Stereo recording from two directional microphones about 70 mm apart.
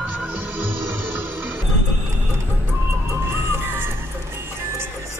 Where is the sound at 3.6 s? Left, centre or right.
Right.